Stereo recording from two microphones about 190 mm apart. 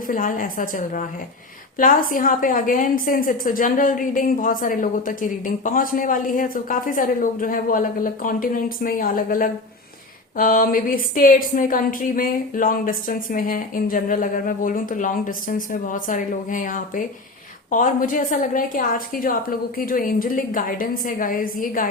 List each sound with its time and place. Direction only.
0.1 s a woman's voice: 45° left (ahead or behind)